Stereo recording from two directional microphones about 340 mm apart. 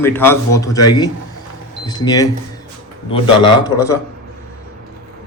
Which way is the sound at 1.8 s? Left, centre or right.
Centre.